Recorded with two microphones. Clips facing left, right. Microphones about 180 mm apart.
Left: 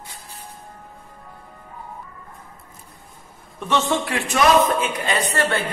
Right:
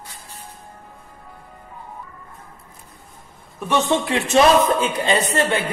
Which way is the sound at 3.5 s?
10° right (ahead or behind).